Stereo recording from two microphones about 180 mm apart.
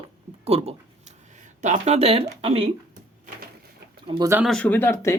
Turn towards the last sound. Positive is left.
turn(degrees=15)  # may be behind; listen again after turning